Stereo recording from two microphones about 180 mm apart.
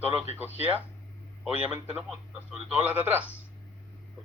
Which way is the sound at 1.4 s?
5° right (ahead or behind).